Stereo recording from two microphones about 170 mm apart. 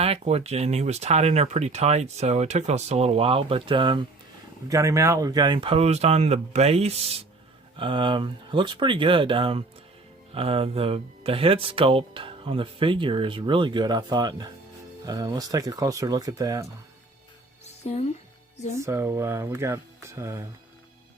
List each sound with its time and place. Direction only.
0.0 s speech: 35° right (ahead or behind); by 16.6 s 20° right (ahead or behind)
17.8 s speech: 40° left (ahead or behind)
18.8 s speech: 15° right (ahead or behind)